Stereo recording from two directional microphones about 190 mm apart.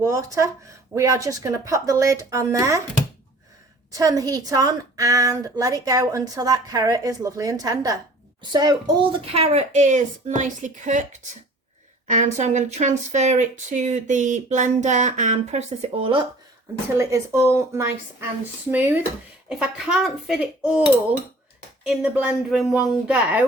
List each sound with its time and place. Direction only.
0.0 s a woman's voice: 15° right (ahead or behind)
3.9 s a woman's voice: 20° right (ahead or behind)
17.0 s a woman's voice: 15° right (ahead or behind)
21.8 s a woman's voice: 5° right (ahead or behind)